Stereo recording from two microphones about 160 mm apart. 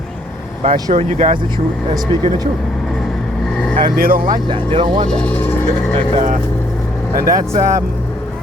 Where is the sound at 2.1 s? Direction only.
20° left (ahead or behind).